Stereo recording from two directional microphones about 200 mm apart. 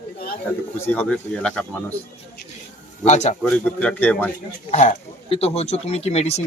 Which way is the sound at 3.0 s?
35° left (ahead or behind).